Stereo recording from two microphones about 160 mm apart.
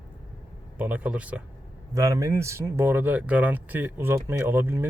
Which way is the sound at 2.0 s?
20° right (ahead or behind).